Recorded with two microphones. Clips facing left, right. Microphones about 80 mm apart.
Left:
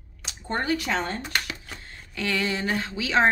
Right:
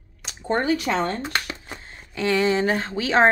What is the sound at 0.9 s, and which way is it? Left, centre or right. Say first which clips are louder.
Speech: right 4 dB; right.